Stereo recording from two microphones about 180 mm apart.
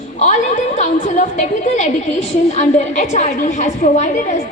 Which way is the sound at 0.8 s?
45° left (ahead or behind).